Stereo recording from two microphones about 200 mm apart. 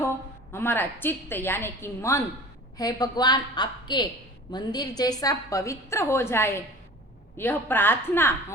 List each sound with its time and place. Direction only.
0.5 s a woman's voice: 10° left (ahead or behind)